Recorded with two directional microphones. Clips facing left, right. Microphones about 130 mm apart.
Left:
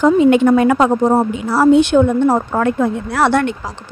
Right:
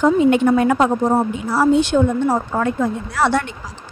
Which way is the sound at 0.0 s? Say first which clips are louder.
Left 3 dB; 90° left.